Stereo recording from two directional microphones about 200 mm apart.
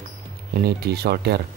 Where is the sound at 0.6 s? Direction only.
55° right (ahead or behind).